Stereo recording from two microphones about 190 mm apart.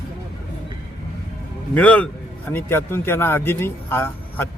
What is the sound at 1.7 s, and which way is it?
Speech, 10° left (ahead or behind).